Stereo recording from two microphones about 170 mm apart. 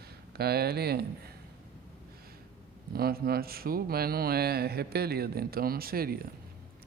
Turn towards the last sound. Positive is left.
turn(degrees=-60)  # may be behind; listen again after turning